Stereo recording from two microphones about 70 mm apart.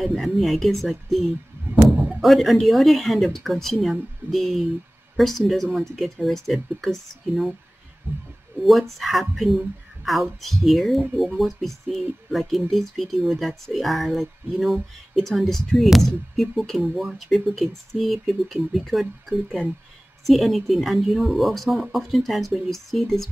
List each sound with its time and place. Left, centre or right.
0.0 s speech: centre
8.1 s speech: right
9.3 s speech: centre